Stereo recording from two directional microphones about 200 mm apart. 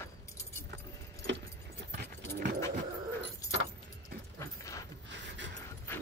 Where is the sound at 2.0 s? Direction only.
55° right (ahead or behind).